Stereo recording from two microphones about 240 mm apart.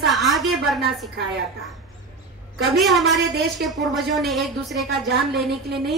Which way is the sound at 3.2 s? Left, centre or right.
Right.